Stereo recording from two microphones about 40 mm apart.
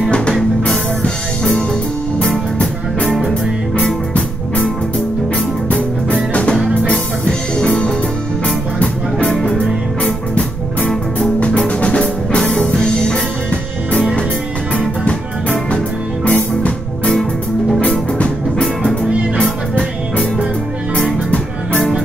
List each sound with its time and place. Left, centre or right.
0.7 s music: left
3.1 s music: centre
3.7 s music: left
7.2 s music: centre
9.4 s music: centre
11.6 s music: left
15.0 s music: left